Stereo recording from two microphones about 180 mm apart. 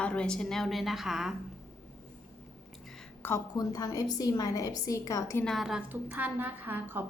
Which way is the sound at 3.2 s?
10° left (ahead or behind).